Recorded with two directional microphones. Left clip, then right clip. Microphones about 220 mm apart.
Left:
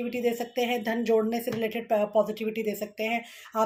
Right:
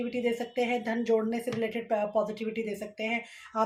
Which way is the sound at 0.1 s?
40° left (ahead or behind).